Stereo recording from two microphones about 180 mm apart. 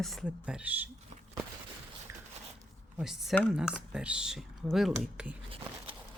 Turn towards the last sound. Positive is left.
turn(degrees=-5)  # may be behind; listen again after turning